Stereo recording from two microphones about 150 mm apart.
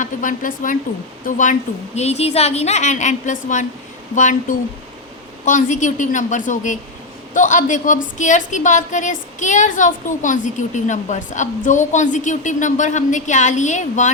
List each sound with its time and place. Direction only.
0.0 s a woman's voice: 60° left (ahead or behind)
2.0 s a woman's voice: 45° left (ahead or behind)